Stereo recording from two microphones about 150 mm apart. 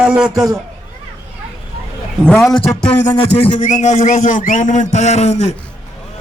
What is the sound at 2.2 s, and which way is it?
Speech, 5° left (ahead or behind).